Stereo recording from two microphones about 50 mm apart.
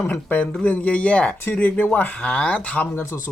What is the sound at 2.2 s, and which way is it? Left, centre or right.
Speech, left.